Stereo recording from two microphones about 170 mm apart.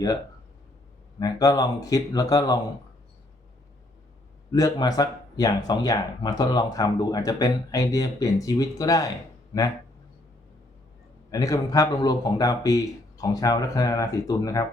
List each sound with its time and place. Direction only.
1.2 s speech: 20° left (ahead or behind)
4.5 s speech: 20° left (ahead or behind)
11.3 s speech: 20° left (ahead or behind)